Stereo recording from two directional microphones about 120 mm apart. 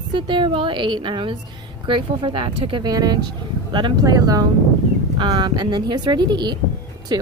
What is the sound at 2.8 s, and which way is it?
Speech, 35° right (ahead or behind).